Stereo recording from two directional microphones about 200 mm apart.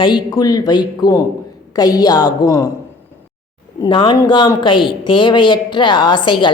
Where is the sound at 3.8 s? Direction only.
25° left (ahead or behind).